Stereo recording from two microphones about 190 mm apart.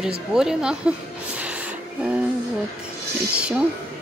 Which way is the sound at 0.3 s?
5° right (ahead or behind).